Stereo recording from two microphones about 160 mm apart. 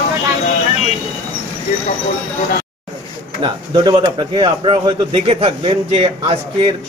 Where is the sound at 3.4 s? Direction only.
30° right (ahead or behind).